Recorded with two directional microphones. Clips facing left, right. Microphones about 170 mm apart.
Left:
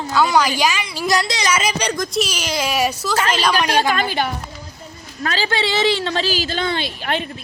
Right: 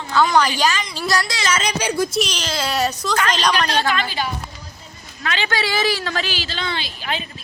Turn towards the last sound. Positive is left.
turn(degrees=55)  # may be behind; listen again after turning